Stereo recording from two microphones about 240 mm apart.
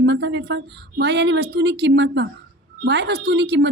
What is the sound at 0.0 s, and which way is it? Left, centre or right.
A woman's voice, right.